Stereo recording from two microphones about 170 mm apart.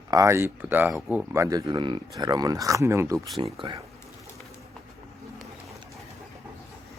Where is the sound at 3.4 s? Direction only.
30° right (ahead or behind).